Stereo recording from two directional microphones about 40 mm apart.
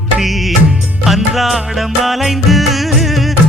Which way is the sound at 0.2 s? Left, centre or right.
Centre.